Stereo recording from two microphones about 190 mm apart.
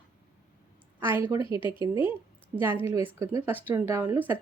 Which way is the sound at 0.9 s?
10° right (ahead or behind).